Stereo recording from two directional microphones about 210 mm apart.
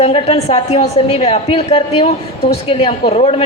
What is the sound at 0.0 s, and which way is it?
A woman's voice, 30° left (ahead or behind).